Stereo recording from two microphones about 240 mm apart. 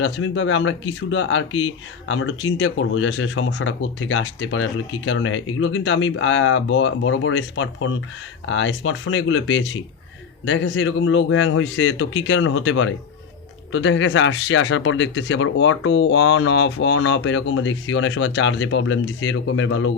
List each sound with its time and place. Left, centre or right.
0.0 s speech: left